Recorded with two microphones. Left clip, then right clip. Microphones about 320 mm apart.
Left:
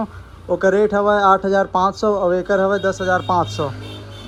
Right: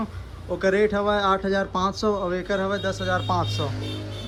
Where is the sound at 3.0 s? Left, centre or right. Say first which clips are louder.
Left 7 dB; left.